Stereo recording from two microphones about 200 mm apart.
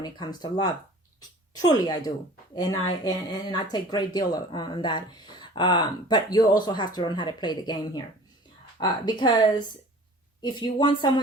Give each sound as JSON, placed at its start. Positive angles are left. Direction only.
{"t": 0.0, "sound": "speech", "side_deg": 20}